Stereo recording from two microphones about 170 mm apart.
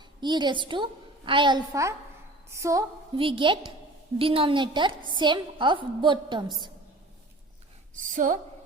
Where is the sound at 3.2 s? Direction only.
30° right (ahead or behind).